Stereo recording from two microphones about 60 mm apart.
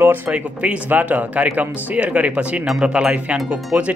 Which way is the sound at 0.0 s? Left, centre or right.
Right.